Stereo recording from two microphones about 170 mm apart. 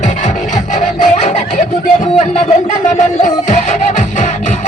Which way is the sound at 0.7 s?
45° left (ahead or behind).